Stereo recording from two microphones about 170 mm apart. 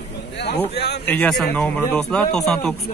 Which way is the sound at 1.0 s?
5° left (ahead or behind).